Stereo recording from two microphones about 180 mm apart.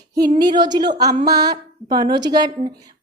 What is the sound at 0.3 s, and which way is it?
A woman's voice, 25° right (ahead or behind).